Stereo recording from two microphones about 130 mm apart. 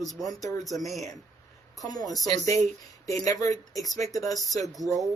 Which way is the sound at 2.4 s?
60° right (ahead or behind).